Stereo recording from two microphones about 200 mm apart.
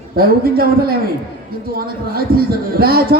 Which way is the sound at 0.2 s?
50° right (ahead or behind).